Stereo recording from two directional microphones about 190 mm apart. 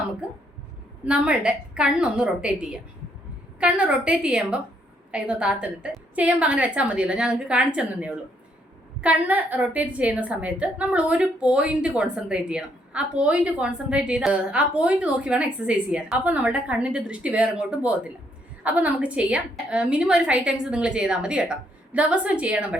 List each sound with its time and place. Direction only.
1.0 s a woman's voice: 5° right (ahead or behind)